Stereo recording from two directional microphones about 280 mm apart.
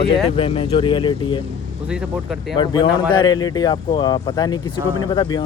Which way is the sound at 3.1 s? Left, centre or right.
Centre.